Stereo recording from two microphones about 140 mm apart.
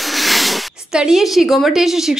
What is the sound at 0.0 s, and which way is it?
Speech, centre (ahead or behind).